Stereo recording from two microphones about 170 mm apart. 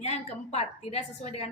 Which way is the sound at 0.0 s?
40° left (ahead or behind).